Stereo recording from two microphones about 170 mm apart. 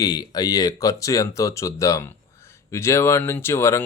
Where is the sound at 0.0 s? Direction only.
25° left (ahead or behind).